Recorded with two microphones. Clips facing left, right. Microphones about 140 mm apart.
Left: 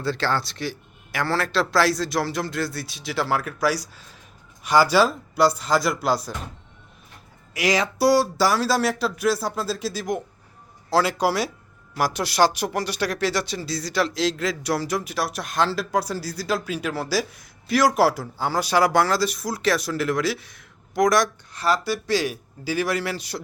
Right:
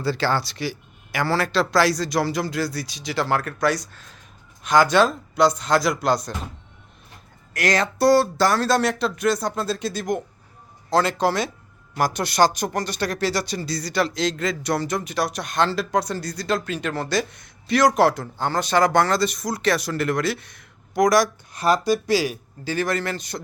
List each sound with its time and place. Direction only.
0.0 s speech: centre (ahead or behind)
7.5 s speech: 5° left (ahead or behind)
21.5 s speech: 15° right (ahead or behind)
22.2 s a man's voice: 5° left (ahead or behind)